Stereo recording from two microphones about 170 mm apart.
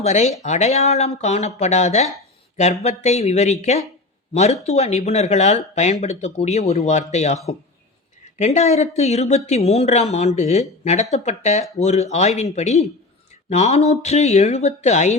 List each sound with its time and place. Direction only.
0.0 s speech: 40° left (ahead or behind)